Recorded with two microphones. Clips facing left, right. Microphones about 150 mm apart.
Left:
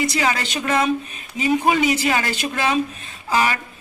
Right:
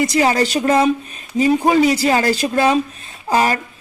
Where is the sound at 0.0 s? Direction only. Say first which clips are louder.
Right 6 dB; 40° right (ahead or behind).